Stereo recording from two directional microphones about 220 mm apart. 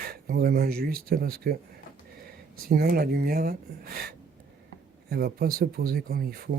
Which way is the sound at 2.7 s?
45° right (ahead or behind).